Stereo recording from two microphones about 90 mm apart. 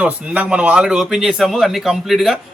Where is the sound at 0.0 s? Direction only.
15° right (ahead or behind).